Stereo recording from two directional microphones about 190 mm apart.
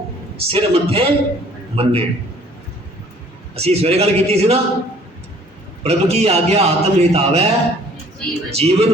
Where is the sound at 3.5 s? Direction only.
30° right (ahead or behind).